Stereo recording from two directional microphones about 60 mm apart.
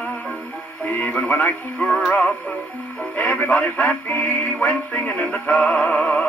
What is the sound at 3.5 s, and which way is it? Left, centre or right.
Music, centre.